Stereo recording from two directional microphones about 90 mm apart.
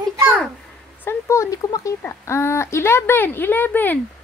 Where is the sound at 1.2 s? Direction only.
35° left (ahead or behind).